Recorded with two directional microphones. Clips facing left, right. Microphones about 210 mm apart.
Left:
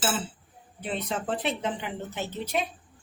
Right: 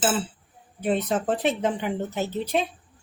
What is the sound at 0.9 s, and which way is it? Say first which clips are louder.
Speech: right 7 dB; 45° right (ahead or behind).